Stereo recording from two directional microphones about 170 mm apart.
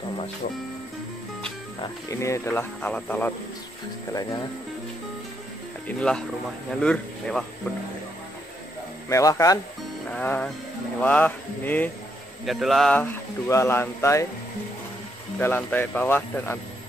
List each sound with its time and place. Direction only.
1.8 s speech: 20° left (ahead or behind)
4.1 s speech: 20° left (ahead or behind)
5.9 s speech: 5° left (ahead or behind)
9.1 s speech: 20° left (ahead or behind)
10.0 s speech: 10° left (ahead or behind)
12.4 s speech: centre (ahead or behind); by 14.2 s 15° left (ahead or behind)
15.3 s speech: 10° left (ahead or behind)